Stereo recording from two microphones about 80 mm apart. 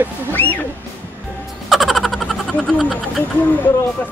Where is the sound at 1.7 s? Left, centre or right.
Centre.